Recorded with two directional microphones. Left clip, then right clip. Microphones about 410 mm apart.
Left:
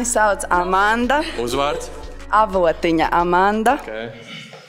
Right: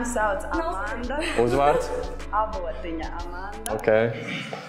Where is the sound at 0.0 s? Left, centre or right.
Left.